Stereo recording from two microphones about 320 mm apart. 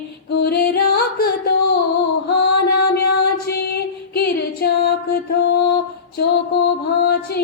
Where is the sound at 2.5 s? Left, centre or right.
Left.